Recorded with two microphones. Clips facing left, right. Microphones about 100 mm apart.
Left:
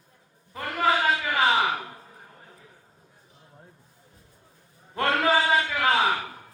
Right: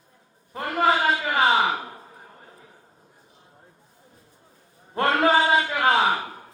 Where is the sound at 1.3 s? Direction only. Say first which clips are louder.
Right 4 dB; 20° right (ahead or behind).